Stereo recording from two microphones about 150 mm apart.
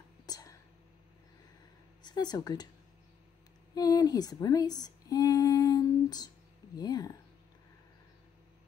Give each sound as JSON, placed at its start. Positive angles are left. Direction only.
{"t": 0.3, "sound": "whispering", "side_deg": 25}
{"t": 2.0, "sound": "speech", "side_deg": 25}
{"t": 3.7, "sound": "speech", "side_deg": 25}